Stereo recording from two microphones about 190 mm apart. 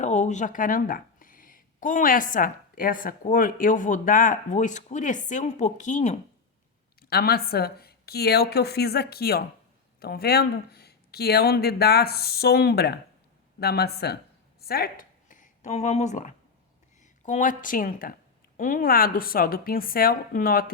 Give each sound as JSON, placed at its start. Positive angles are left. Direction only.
{"t": 0.0, "sound": "speech", "side_deg": 35}
{"t": 7.0, "sound": "speech", "side_deg": 55}
{"t": 14.6, "sound": "a sound", "side_deg": 55}
{"t": 17.0, "sound": "speech", "side_deg": 40}